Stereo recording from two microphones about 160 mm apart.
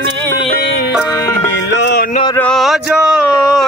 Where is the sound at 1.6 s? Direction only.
90° left.